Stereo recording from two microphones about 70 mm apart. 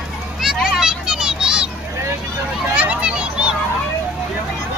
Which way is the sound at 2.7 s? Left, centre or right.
Centre.